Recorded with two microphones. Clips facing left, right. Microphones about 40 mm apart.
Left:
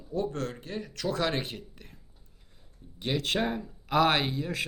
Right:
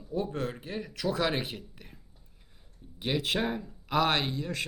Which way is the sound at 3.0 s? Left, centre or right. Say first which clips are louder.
Left 1 dB; centre.